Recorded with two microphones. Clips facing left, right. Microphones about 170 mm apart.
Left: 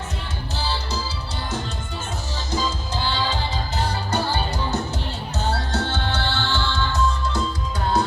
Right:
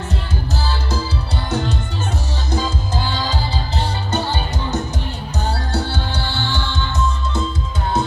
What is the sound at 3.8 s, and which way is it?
Music, 25° right (ahead or behind).